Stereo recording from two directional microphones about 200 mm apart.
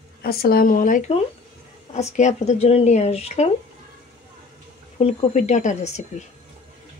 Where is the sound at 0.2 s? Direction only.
50° left (ahead or behind); by 3.4 s 30° left (ahead or behind).